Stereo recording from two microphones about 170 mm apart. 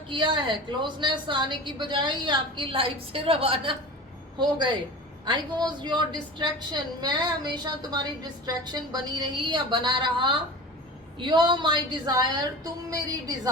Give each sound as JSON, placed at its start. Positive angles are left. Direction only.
{"t": 0.1, "sound": "a woman's voice", "side_deg": -30}